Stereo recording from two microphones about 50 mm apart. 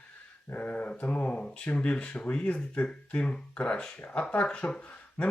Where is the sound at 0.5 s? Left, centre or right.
Left.